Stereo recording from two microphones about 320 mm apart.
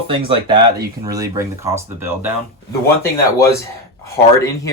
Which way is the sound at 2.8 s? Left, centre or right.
Centre.